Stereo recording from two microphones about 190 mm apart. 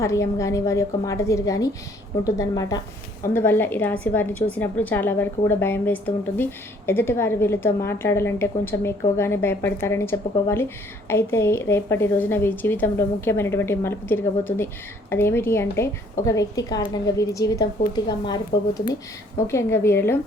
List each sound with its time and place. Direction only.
0.0 s a woman's voice: 15° left (ahead or behind)